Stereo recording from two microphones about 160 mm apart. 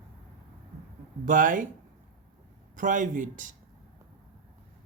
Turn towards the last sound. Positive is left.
turn(degrees=-55)  # may be behind; listen again after turning